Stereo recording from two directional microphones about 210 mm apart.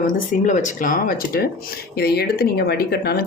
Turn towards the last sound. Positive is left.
turn(degrees=50)  # may be behind; listen again after turning